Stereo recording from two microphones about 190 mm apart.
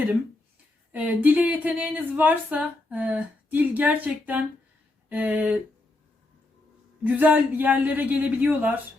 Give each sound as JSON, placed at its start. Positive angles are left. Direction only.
{"t": 0.9, "sound": "speech", "side_deg": -5}
{"t": 7.0, "sound": "speech", "side_deg": -10}